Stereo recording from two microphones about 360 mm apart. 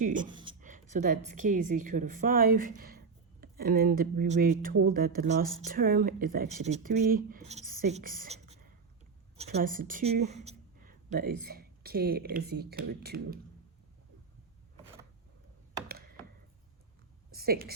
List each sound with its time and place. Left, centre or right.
0.0 s a sound: centre
1.4 s speech: right
17.3 s a woman's voice: right